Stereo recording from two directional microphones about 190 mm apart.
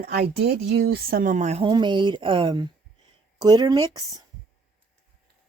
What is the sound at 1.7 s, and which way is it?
Speech, 25° right (ahead or behind).